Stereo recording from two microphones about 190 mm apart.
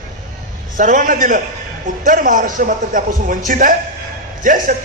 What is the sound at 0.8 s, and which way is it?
A man's voice, 45° right (ahead or behind).